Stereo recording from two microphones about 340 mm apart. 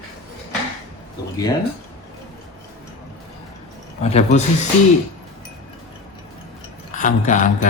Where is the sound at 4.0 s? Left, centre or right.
Centre.